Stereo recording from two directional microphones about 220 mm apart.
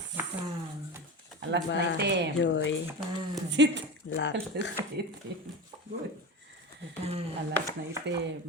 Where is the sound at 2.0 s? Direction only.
50° right (ahead or behind).